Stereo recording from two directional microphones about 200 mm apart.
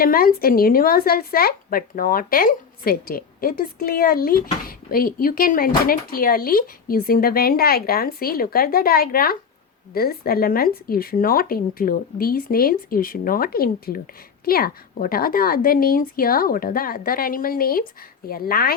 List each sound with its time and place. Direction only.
0.0 s speech: 45° left (ahead or behind)